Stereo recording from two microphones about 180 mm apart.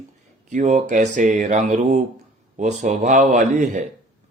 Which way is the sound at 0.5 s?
40° right (ahead or behind).